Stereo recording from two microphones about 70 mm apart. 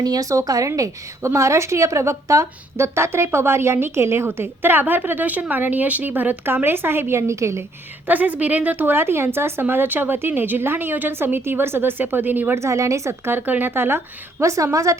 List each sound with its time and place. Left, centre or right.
0.0 s speech: right
0.8 s a woman's voice: right
4.3 s a woman's voice: right
8.0 s a woman's voice: right
12.5 s a woman's voice: right
14.4 s a woman's voice: right